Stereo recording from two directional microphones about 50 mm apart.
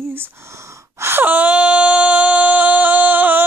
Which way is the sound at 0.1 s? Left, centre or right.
Right.